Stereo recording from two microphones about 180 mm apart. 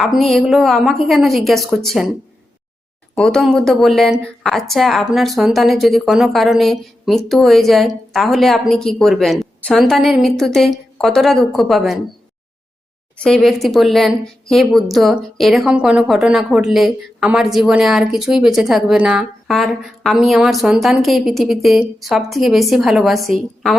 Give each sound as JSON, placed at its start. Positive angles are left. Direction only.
{"t": 0.0, "sound": "speech", "side_deg": 0}
{"t": 3.2, "sound": "speech", "side_deg": 5}
{"t": 13.1, "sound": "speech", "side_deg": 5}